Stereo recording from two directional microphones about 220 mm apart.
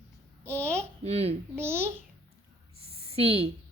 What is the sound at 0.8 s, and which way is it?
Speech, 30° right (ahead or behind).